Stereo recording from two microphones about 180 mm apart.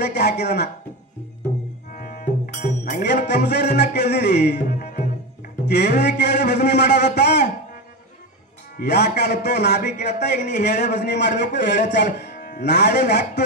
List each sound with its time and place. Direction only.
0.0 s speech: 65° left (ahead or behind)
2.0 s music: 55° left (ahead or behind)
3.3 s speech: 70° left (ahead or behind)
5.7 s speech: 65° left (ahead or behind)
8.7 s speech: 70° left (ahead or behind)
10.1 s a man's voice: 40° left (ahead or behind)
10.5 s speech: 70° left (ahead or behind)
12.4 s music: 50° left (ahead or behind)
12.6 s speech: 70° left (ahead or behind)